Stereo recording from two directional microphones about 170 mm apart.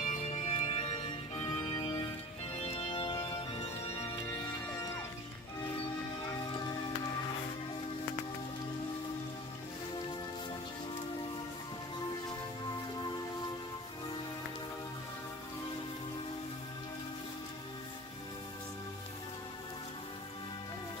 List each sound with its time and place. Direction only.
0.0 s music: 45° left (ahead or behind)
2.6 s music: 35° left (ahead or behind)
3.6 s music: 40° left (ahead or behind)